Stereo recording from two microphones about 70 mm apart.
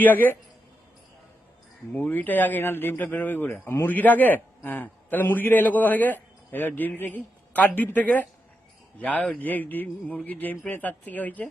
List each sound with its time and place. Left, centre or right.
0.0 s a man's voice: left
1.9 s a man's voice: left